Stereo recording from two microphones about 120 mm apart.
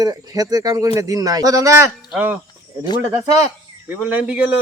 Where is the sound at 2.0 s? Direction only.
5° right (ahead or behind).